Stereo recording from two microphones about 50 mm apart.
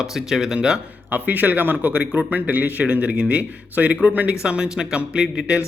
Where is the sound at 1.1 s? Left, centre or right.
Right.